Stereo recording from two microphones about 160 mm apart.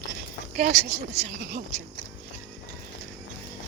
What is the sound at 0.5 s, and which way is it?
Speech, 50° right (ahead or behind).